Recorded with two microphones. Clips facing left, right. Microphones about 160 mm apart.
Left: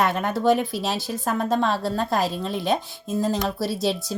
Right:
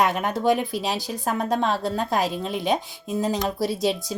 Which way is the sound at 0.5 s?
Centre (ahead or behind).